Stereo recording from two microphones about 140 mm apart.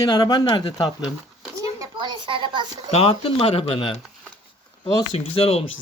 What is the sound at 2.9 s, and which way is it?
Speech, 45° left (ahead or behind).